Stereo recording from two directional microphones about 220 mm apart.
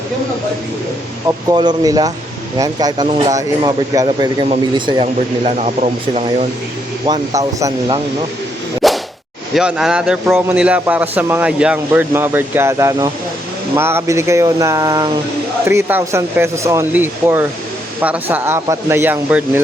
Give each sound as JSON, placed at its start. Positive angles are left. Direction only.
{"t": 1.5, "sound": "a man's voice", "side_deg": -20}
{"t": 7.0, "sound": "speech", "side_deg": -15}
{"t": 8.8, "sound": "whip", "side_deg": 0}
{"t": 9.6, "sound": "a man's voice", "side_deg": 0}